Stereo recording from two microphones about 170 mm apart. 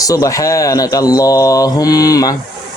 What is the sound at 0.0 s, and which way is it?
Mantra, 20° left (ahead or behind).